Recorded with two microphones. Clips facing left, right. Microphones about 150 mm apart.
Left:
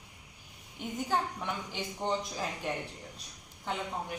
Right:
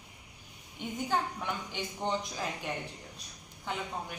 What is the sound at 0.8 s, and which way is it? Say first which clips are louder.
Speech: even; centre (ahead or behind).